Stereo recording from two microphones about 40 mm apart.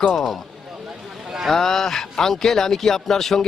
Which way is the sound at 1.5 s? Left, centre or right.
Centre.